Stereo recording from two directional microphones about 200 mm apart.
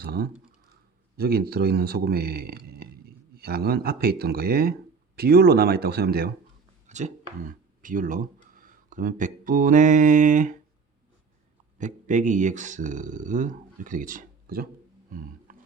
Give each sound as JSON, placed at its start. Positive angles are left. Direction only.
{"t": 0.0, "sound": "a man's voice", "side_deg": -50}
{"t": 6.8, "sound": "speech", "side_deg": -35}
{"t": 11.8, "sound": "speech", "side_deg": -35}
{"t": 15.5, "sound": "roaring cats", "side_deg": -45}